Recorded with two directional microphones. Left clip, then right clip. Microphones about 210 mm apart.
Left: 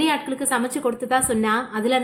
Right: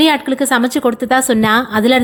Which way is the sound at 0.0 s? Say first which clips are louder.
Right 9 dB; 40° right (ahead or behind).